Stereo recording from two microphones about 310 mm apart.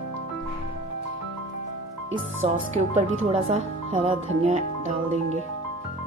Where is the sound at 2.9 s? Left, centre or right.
Right.